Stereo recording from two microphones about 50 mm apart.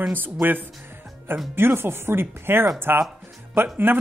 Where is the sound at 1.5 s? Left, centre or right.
Right.